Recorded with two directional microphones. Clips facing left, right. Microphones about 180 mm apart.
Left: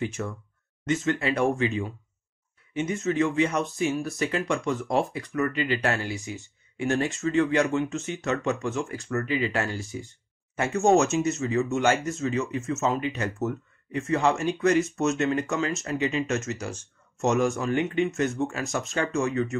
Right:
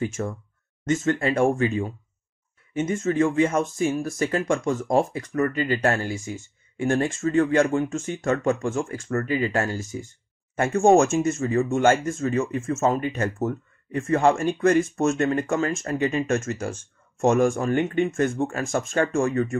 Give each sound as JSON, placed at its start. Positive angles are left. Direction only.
{"t": 0.0, "sound": "speech", "side_deg": -45}